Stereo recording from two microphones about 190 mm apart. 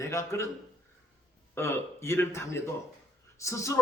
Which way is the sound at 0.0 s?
15° left (ahead or behind).